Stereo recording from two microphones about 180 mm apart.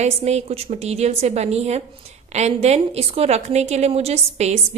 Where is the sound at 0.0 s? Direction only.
35° right (ahead or behind).